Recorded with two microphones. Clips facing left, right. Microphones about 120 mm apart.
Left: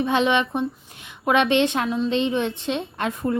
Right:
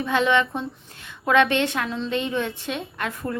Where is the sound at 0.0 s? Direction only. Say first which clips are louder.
Left 1 dB; 20° left (ahead or behind).